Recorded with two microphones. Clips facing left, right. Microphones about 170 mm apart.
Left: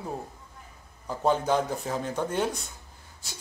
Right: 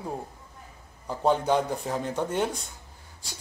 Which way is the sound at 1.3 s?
15° right (ahead or behind).